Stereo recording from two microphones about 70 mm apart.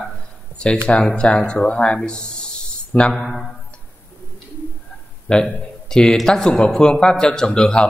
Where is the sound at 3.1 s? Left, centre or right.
Centre.